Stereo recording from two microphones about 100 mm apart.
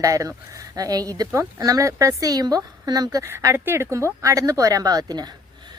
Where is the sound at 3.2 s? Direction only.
25° right (ahead or behind).